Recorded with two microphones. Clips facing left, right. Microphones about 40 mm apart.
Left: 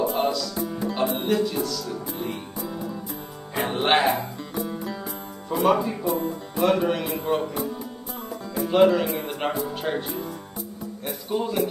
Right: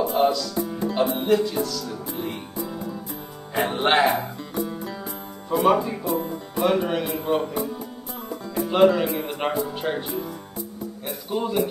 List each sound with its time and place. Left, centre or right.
0.1 s music: centre
1.1 s speech: centre
2.2 s music: centre
2.6 s music: centre
5.7 s a man's voice: centre